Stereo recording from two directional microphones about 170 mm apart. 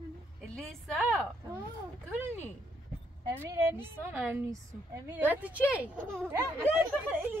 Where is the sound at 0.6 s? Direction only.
Centre (ahead or behind).